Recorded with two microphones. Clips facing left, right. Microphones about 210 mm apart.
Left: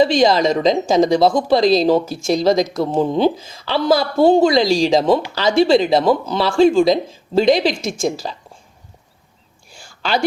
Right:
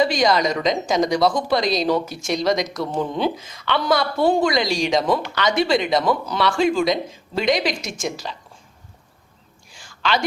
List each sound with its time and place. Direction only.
0.0 s speech: 25° left (ahead or behind)
10.0 s speech: 35° left (ahead or behind)